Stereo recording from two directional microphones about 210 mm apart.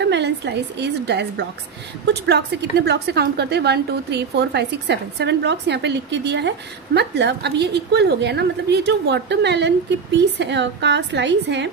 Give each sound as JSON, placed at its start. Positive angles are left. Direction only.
{"t": 0.0, "sound": "a woman's voice", "side_deg": -55}
{"t": 2.2, "sound": "a woman's voice", "side_deg": -50}